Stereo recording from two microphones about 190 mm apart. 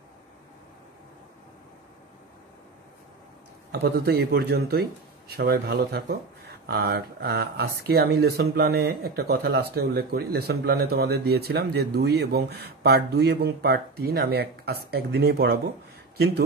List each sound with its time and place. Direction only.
3.7 s speech: 55° right (ahead or behind)